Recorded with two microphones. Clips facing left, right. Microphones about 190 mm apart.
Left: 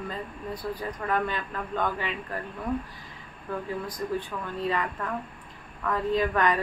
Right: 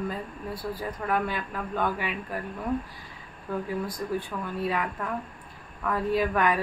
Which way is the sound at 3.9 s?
10° right (ahead or behind).